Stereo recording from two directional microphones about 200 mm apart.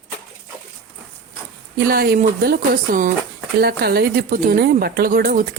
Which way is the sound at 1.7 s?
50° right (ahead or behind).